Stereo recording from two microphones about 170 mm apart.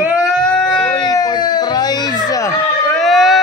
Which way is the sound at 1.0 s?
25° left (ahead or behind).